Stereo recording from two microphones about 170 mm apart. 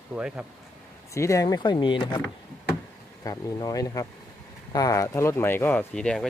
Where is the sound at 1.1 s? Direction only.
20° left (ahead or behind).